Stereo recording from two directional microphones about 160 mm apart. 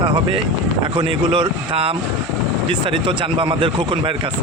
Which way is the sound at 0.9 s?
30° right (ahead or behind).